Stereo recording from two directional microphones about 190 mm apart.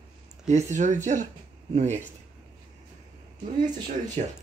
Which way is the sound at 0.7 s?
40° right (ahead or behind).